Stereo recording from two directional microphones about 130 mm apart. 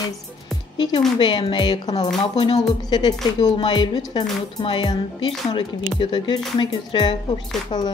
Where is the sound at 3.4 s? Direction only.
35° left (ahead or behind).